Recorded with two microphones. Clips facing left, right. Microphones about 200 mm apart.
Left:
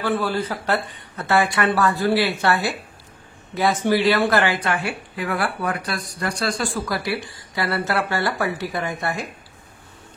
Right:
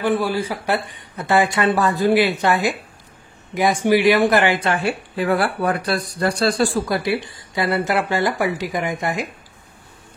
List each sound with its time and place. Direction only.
0.0 s speech: 15° right (ahead or behind); by 6.8 s 30° right (ahead or behind)
6.9 s speech: 20° right (ahead or behind)